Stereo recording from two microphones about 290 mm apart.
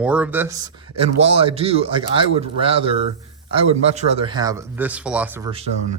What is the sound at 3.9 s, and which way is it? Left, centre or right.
Speech, right.